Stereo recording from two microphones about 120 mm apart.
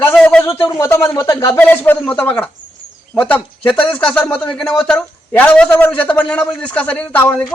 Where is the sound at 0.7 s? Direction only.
25° left (ahead or behind).